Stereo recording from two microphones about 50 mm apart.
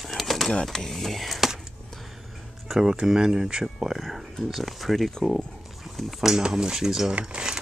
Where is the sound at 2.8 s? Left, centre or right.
Centre.